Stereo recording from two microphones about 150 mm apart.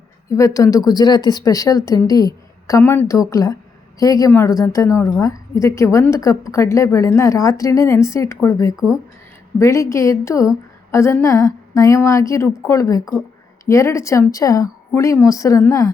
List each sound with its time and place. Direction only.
0.3 s a woman's voice: 20° left (ahead or behind)